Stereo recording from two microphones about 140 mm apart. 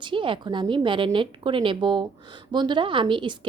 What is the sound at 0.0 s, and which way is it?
A woman's voice, 35° right (ahead or behind).